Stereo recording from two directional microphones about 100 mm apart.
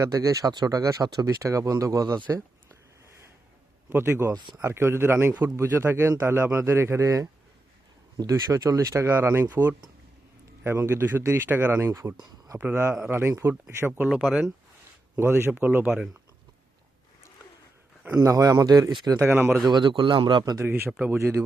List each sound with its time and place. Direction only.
0.0 s speech: 30° right (ahead or behind)
3.8 s speech: 25° right (ahead or behind)
14.1 s speech: centre (ahead or behind)
15.1 s speech: 20° right (ahead or behind)
18.1 s speech: 35° right (ahead or behind)
19.2 s speech: 20° right (ahead or behind)
19.6 s a man's voice: 50° right (ahead or behind)
20.6 s speech: 20° right (ahead or behind)